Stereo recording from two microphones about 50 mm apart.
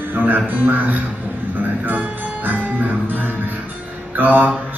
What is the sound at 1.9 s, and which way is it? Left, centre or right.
Music, right.